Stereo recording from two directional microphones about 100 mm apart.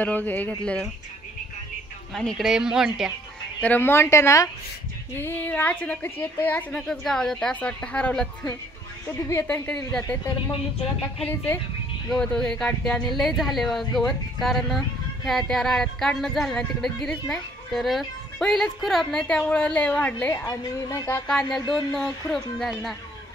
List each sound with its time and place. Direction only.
0.0 s a woman's voice: 15° left (ahead or behind)
2.1 s speech: centre (ahead or behind)
3.6 s a woman's voice: 20° left (ahead or behind)
5.2 s a woman's voice: 20° left (ahead or behind)
6.9 s a woman's voice: 5° left (ahead or behind)
9.3 s a woman's voice: 25° left (ahead or behind)
11.2 s a woman's voice: 20° left (ahead or behind)
12.1 s speech: 5° left (ahead or behind)
20.4 s a woman's voice: 35° left (ahead or behind)
21.1 s speech: 5° left (ahead or behind)